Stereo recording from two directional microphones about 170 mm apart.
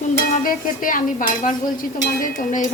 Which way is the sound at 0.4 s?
55° left (ahead or behind).